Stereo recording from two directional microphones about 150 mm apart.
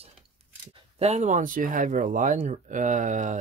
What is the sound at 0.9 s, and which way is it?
Speech, 45° right (ahead or behind).